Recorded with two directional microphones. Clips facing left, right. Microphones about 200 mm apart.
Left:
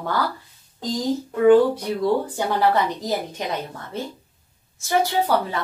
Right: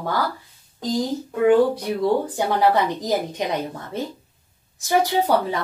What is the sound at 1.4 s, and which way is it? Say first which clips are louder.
A woman's voice: left 2 dB; 10° right (ahead or behind).